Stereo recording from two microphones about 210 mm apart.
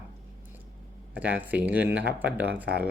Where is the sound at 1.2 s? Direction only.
5° right (ahead or behind).